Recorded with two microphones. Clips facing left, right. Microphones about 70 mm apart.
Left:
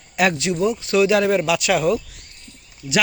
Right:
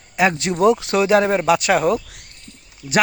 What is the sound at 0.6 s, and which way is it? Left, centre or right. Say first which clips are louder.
Speech: right 8 dB; right.